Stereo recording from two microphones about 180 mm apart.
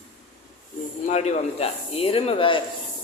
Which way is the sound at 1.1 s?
40° left (ahead or behind).